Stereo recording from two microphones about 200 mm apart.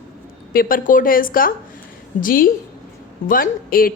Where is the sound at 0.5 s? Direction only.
45° left (ahead or behind).